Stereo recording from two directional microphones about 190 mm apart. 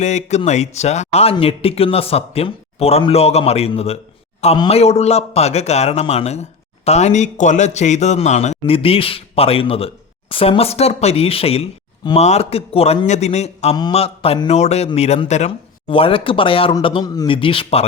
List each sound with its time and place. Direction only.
0.0 s a man's voice: 35° left (ahead or behind)